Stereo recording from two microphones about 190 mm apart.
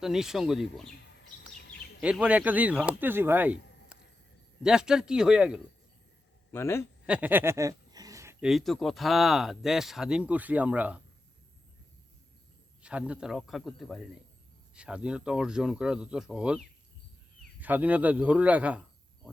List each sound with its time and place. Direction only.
0.0 s speech: 5° right (ahead or behind)
1.5 s a sound: 55° left (ahead or behind)
2.0 s speech: 5° right (ahead or behind)
6.5 s a man's voice: 15° left (ahead or behind)
7.0 s a sound: 5° right (ahead or behind)
8.4 s speech: centre (ahead or behind)
12.8 s speech: 5° right (ahead or behind)
17.6 s speech: 10° right (ahead or behind)